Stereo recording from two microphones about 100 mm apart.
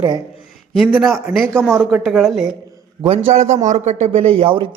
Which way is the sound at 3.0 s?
75° right (ahead or behind).